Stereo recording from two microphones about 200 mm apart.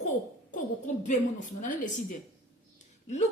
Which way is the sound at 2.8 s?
35° left (ahead or behind).